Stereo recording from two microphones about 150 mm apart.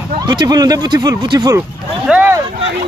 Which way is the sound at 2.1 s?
10° right (ahead or behind).